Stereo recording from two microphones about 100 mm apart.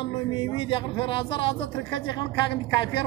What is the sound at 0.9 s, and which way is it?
Speech, 65° left (ahead or behind).